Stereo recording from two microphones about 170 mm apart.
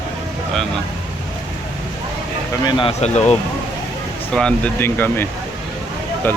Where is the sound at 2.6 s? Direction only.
30° left (ahead or behind).